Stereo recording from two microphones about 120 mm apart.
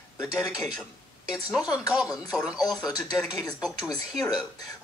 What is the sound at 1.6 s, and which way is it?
Speech, 30° left (ahead or behind).